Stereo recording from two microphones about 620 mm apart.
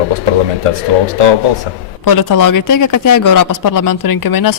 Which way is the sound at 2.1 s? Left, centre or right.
Left.